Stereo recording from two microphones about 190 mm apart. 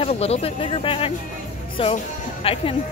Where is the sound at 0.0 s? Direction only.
30° left (ahead or behind).